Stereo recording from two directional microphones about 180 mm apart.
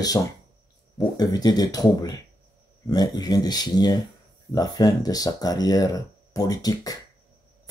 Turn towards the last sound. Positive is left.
turn(degrees=20)  # may be behind; listen again after turning